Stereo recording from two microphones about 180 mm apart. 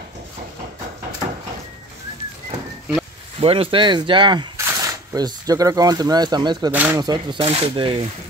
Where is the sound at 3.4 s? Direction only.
30° right (ahead or behind).